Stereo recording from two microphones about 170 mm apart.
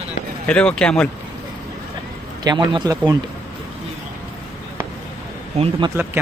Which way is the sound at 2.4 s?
25° right (ahead or behind).